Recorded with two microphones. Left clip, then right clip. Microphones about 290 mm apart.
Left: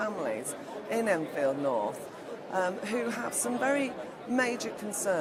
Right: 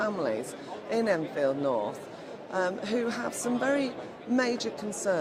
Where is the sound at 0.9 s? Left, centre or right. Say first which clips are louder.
Right 1 dB; left.